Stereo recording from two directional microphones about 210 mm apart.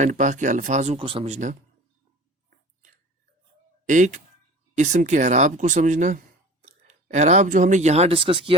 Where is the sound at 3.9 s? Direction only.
35° right (ahead or behind).